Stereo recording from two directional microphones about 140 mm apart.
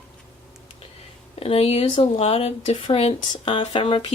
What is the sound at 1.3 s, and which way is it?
Speech, 45° left (ahead or behind).